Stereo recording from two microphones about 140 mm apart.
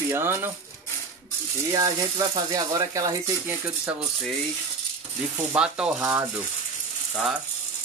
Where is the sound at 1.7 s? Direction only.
25° right (ahead or behind).